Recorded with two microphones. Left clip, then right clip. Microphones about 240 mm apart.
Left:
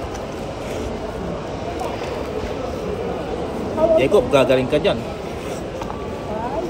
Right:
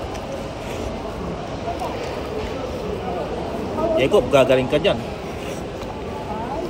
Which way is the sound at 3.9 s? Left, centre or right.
Centre.